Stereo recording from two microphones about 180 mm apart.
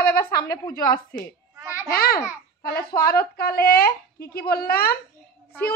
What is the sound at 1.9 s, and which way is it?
A child's voice, 60° left (ahead or behind).